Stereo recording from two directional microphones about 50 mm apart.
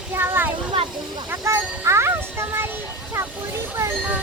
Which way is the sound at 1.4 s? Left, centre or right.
Right.